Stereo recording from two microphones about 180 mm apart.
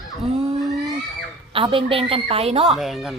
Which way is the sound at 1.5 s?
30° right (ahead or behind).